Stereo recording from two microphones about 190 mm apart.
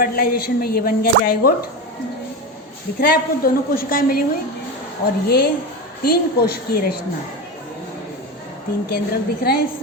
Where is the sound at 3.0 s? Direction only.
50° left (ahead or behind).